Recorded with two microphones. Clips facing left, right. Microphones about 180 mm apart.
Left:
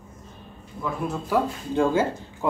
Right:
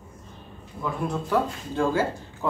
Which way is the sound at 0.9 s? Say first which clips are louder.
Even; 5° left (ahead or behind).